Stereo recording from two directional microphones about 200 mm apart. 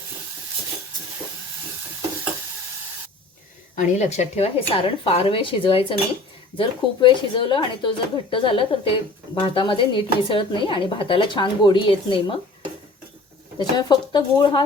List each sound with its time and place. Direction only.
3.8 s speech: 35° left (ahead or behind)
13.6 s speech: 20° left (ahead or behind)